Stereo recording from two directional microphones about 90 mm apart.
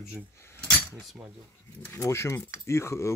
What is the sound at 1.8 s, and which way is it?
Speech, 30° left (ahead or behind).